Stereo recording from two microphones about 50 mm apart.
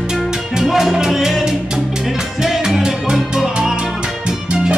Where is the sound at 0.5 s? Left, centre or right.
Centre.